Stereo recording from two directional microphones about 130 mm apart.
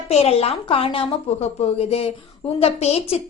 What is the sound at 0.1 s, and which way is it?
A woman's voice, 50° left (ahead or behind).